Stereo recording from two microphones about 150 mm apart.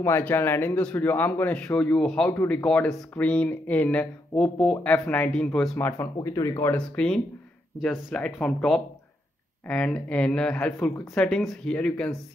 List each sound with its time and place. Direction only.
0.0 s speech: 15° left (ahead or behind)